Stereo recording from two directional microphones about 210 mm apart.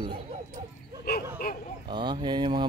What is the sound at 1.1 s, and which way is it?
Dog, 50° left (ahead or behind).